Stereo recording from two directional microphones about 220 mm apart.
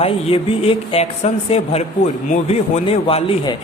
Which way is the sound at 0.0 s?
25° left (ahead or behind).